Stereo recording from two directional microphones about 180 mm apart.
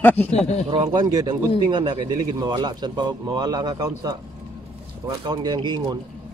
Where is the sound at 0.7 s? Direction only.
30° right (ahead or behind).